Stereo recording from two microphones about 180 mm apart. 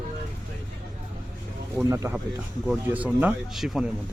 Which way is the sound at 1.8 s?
15° right (ahead or behind).